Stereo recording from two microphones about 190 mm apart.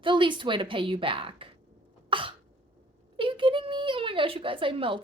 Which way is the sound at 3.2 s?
25° right (ahead or behind).